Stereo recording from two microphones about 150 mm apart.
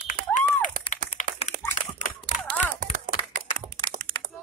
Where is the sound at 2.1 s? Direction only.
10° left (ahead or behind).